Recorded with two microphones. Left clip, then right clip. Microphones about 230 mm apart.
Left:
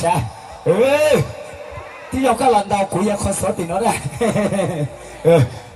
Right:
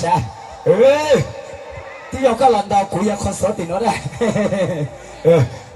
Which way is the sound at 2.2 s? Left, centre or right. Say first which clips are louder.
Right 1 dB; left.